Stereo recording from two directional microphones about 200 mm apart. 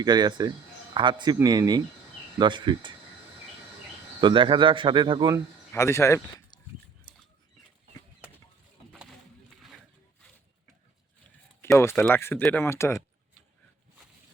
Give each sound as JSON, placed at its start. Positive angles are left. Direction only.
{"t": 0.0, "sound": "speech", "side_deg": -20}
{"t": 4.2, "sound": "speech", "side_deg": -25}
{"t": 5.7, "sound": "speech", "side_deg": 15}
{"t": 11.6, "sound": "speech", "side_deg": 15}